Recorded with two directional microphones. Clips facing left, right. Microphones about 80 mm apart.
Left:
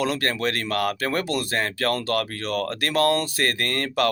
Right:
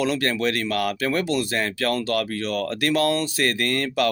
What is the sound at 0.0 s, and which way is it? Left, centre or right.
Speech, left.